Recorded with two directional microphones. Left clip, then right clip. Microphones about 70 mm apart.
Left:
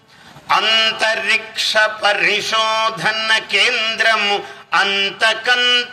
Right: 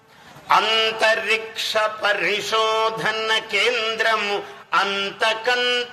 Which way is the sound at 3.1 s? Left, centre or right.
Right.